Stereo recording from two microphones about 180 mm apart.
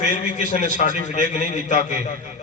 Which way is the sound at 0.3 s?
45° left (ahead or behind).